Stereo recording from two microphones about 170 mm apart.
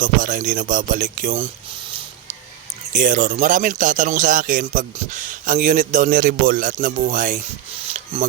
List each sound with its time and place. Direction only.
0.0 s speech: 50° right (ahead or behind)
2.9 s speech: 50° right (ahead or behind)